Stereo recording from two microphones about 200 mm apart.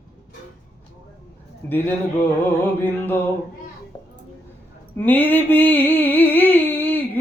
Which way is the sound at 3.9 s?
20° left (ahead or behind).